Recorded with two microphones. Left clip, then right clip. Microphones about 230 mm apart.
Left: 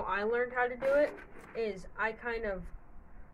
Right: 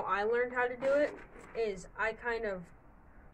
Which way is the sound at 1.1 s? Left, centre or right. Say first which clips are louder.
Left 1 dB; left.